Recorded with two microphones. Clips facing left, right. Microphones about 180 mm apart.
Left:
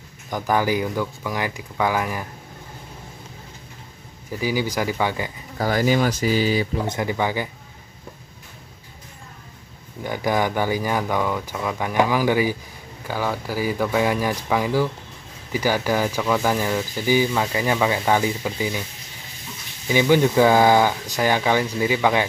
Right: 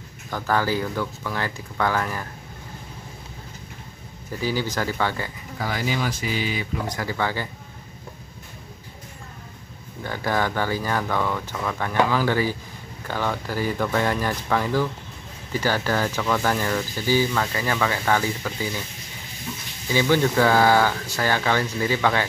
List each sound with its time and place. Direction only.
0.3 s speech: 15° left (ahead or behind)
4.3 s speech: 10° left (ahead or behind)
5.6 s speech: 45° left (ahead or behind)
6.9 s speech: 20° left (ahead or behind)
10.0 s speech: 15° left (ahead or behind)
19.9 s speech: 15° left (ahead or behind)